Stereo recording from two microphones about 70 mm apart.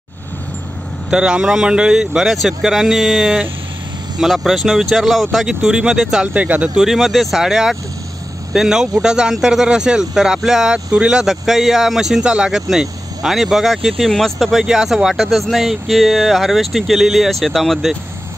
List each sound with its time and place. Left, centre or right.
1.1 s speech: centre
6.2 s speech: centre
6.8 s speech: centre
14.6 s speech: centre